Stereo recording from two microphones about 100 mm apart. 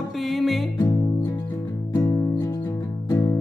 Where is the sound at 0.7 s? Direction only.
45° left (ahead or behind).